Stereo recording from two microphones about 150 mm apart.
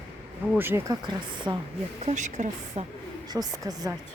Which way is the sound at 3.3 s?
25° right (ahead or behind).